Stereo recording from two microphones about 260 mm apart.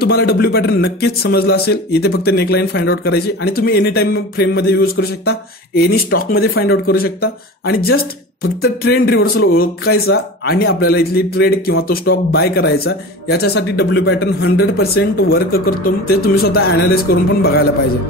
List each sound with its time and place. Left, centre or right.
0.0 s a man's voice: left